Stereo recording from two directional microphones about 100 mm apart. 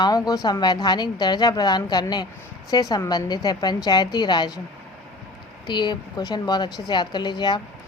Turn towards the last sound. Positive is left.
turn(degrees=45)  # may be behind; listen again after turning